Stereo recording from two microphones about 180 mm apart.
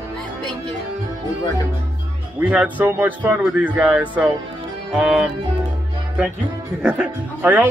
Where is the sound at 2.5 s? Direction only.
10° right (ahead or behind).